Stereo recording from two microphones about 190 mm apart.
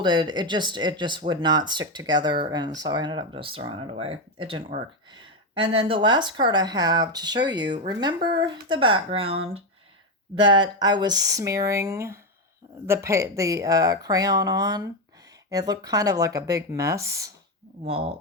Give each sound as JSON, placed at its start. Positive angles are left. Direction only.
{"t": 0.0, "sound": "speech", "side_deg": -25}
{"t": 17.8, "sound": "speech", "side_deg": -30}